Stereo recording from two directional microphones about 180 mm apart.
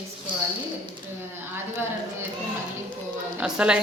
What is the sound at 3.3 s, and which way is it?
Speech, 5° right (ahead or behind).